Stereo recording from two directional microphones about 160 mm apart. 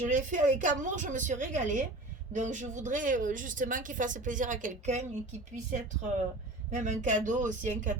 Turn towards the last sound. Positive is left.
turn(degrees=-50)  # may be behind; listen again after turning